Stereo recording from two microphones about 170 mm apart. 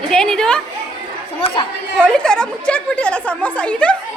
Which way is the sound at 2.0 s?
5° left (ahead or behind).